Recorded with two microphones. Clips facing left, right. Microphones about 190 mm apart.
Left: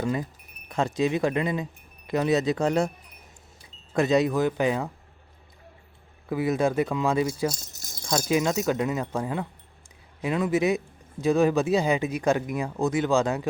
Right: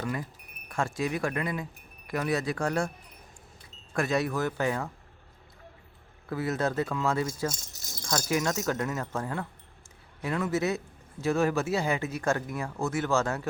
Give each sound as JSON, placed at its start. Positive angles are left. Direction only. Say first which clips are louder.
{"t": 0.0, "sound": "speech", "louder": "left 6 dB", "side_deg": 20}
{"t": 3.9, "sound": "speech", "louder": "left 6 dB", "side_deg": 20}
{"t": 6.2, "sound": "speech", "louder": "left 5 dB", "side_deg": 15}